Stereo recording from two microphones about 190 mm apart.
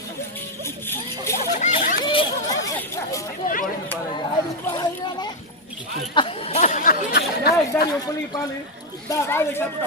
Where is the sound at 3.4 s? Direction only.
45° left (ahead or behind).